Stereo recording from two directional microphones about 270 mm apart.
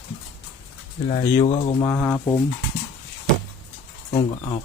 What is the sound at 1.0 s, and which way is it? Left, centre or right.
Speech, left.